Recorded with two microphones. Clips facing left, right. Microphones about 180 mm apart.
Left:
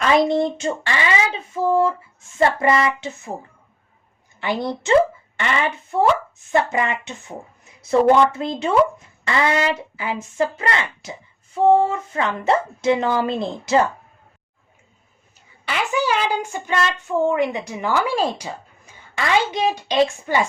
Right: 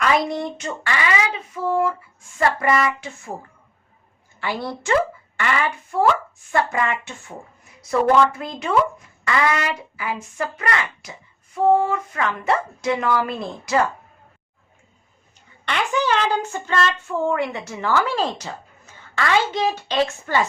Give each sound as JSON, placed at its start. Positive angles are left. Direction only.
{"t": 0.0, "sound": "speech", "side_deg": 25}
{"t": 4.4, "sound": "speech", "side_deg": 20}
{"t": 15.6, "sound": "speech", "side_deg": 5}